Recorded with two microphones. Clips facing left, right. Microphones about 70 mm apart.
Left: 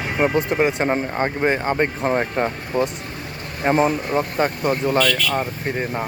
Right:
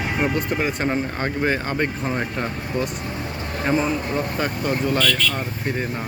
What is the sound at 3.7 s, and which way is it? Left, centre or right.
Speech, left.